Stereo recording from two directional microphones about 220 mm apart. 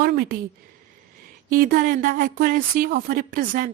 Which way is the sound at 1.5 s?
40° right (ahead or behind).